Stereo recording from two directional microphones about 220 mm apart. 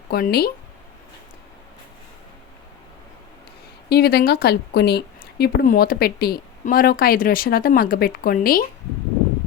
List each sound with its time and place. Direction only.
0.1 s speech: 45° left (ahead or behind)
3.8 s speech: 45° left (ahead or behind)